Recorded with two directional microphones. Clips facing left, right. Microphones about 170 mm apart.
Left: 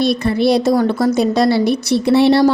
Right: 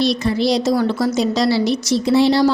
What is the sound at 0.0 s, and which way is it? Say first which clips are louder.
A woman's voice: left 3 dB; 55° left (ahead or behind).